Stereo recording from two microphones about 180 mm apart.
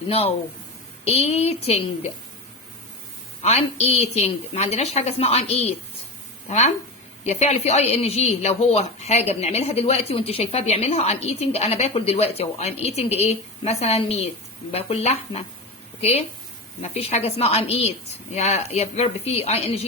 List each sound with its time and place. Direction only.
0.1 s a woman's voice: 35° left (ahead or behind)
3.4 s a woman's voice: 35° left (ahead or behind)
7.3 s a woman's voice: 40° left (ahead or behind)